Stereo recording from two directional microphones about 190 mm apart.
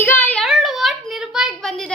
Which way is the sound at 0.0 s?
10° left (ahead or behind).